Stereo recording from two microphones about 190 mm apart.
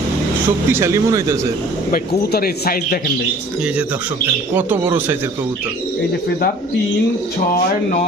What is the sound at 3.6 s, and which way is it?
Speech, 5° right (ahead or behind).